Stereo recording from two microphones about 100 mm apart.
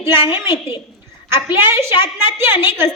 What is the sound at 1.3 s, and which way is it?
A woman's voice, 20° right (ahead or behind).